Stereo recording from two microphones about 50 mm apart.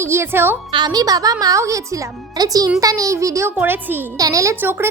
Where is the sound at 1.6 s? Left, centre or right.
Right.